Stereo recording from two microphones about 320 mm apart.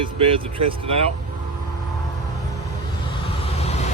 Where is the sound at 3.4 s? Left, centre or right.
Centre.